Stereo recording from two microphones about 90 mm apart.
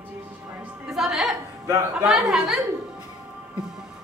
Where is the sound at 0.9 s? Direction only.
Centre (ahead or behind).